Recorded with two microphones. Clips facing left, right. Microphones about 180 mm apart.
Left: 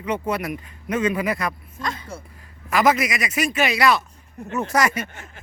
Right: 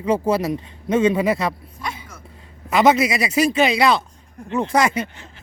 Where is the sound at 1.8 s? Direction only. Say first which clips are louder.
Left 1 dB; 5° right (ahead or behind).